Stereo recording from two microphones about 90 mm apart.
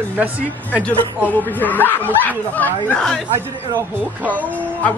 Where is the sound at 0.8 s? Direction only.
20° left (ahead or behind).